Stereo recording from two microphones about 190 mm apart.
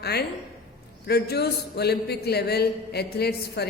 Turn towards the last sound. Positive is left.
turn(degrees=55)  # may be behind; listen again after turning